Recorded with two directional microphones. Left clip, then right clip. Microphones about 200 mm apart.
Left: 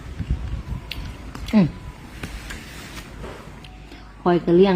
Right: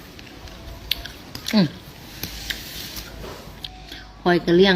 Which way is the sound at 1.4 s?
5° left (ahead or behind).